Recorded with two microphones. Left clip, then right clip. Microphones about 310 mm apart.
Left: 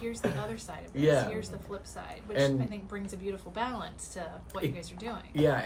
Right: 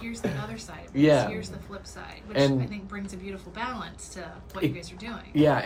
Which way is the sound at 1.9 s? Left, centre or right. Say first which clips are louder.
Right 5 dB; centre.